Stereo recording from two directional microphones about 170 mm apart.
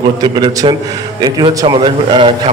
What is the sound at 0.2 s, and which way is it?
A man's voice, 25° right (ahead or behind).